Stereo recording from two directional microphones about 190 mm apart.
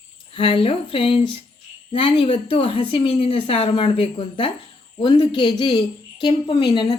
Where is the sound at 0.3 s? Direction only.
30° left (ahead or behind).